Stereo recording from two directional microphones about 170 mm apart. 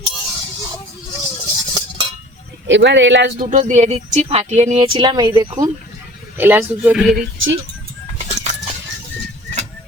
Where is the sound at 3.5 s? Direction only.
45° right (ahead or behind); by 5.7 s 25° right (ahead or behind).